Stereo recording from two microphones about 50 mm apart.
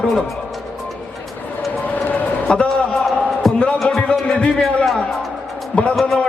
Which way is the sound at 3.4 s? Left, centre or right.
Centre.